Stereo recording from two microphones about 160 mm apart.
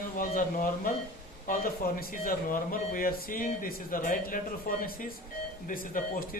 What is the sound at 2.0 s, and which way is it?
Speech, 65° left (ahead or behind).